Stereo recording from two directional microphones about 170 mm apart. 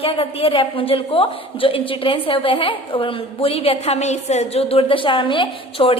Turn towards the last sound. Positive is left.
turn(degrees=30)  # may be behind; listen again after turning